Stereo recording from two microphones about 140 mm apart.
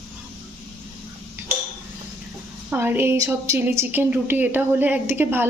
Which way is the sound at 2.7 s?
15° right (ahead or behind).